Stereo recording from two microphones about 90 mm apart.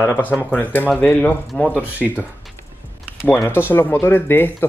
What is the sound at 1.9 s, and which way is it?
Speech, 20° right (ahead or behind).